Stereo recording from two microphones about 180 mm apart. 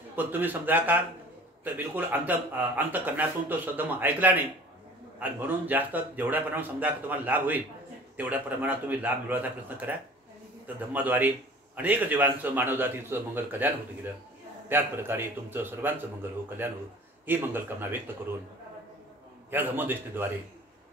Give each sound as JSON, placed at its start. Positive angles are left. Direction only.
{"t": 0.1, "sound": "a man's voice", "side_deg": -10}
{"t": 14.7, "sound": "a man's voice", "side_deg": -10}
{"t": 19.5, "sound": "a man's voice", "side_deg": -10}